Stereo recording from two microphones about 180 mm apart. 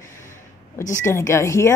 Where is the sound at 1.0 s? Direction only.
15° left (ahead or behind).